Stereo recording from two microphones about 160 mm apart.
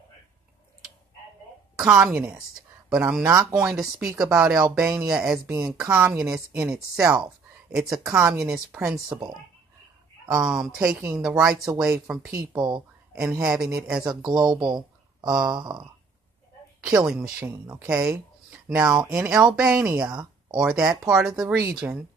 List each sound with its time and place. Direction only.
1.8 s speech: 10° right (ahead or behind)
3.5 s speech: centre (ahead or behind)
10.3 s speech: 5° right (ahead or behind)
11.5 s speech: 20° right (ahead or behind)
11.8 s speech: 5° right (ahead or behind)
12.5 s speech: 25° right (ahead or behind)
13.4 s speech: 5° right (ahead or behind)
14.6 s speech: 25° right (ahead or behind)
16.8 s speech: 5° right (ahead or behind)